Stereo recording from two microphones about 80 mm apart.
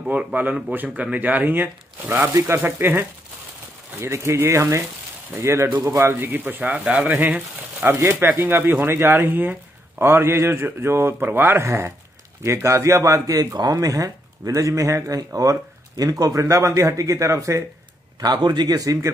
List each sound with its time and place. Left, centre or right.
0.0 s speech: centre
4.0 s speech: right
6.1 s speech: right
18.2 s a man's voice: right